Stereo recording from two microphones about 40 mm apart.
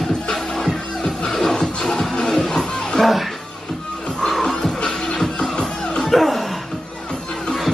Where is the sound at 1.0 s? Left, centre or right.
Centre.